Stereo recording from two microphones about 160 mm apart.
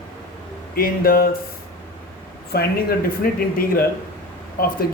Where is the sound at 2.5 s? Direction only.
80° left.